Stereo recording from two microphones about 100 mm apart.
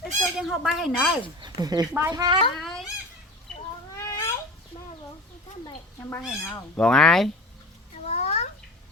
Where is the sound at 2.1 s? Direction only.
40° right (ahead or behind).